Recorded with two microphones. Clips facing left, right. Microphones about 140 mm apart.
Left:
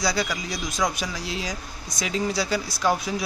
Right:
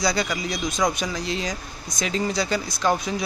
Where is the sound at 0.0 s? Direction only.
Centre (ahead or behind).